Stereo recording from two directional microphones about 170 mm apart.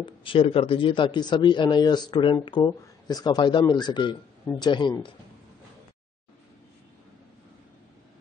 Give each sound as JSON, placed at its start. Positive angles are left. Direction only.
{"t": 0.0, "sound": "speech", "side_deg": 30}